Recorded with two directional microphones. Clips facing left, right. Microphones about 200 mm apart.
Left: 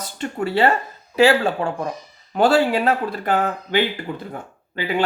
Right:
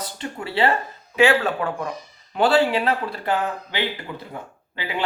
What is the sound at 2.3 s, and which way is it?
Speech, 45° left (ahead or behind).